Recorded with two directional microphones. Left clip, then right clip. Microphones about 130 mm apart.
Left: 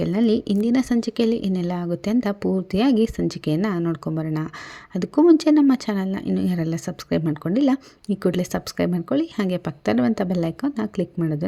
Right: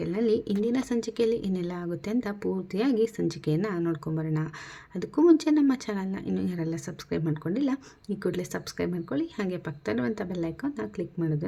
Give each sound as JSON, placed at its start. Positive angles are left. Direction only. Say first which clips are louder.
{"t": 0.0, "sound": "speech", "louder": "left 5 dB", "side_deg": 35}